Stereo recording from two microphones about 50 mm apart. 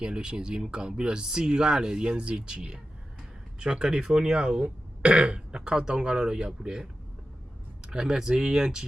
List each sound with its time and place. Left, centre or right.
0.0 s speech: centre